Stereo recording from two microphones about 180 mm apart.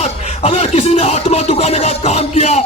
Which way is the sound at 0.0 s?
35° left (ahead or behind).